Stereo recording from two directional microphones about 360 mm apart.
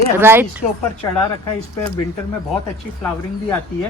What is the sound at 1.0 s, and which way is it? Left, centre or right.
Speech, centre.